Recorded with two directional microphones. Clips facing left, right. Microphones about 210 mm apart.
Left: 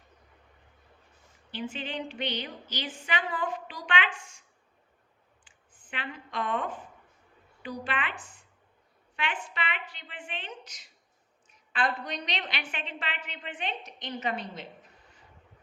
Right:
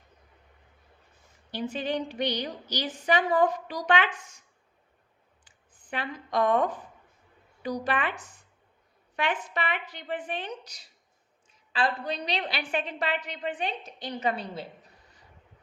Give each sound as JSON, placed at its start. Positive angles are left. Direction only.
{"t": 1.5, "sound": "a woman's voice", "side_deg": -40}
{"t": 5.5, "sound": "a woman's voice", "side_deg": -40}